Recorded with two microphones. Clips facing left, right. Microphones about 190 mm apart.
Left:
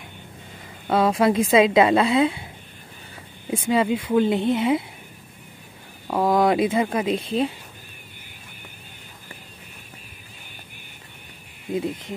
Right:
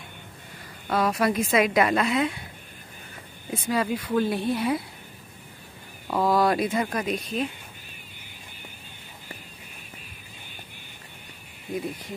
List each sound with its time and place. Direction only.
0.8 s a woman's voice: 25° left (ahead or behind)
3.6 s a woman's voice: 25° left (ahead or behind)
6.0 s a woman's voice: 15° left (ahead or behind); by 7.5 s 30° left (ahead or behind)
11.7 s a woman's voice: 20° left (ahead or behind)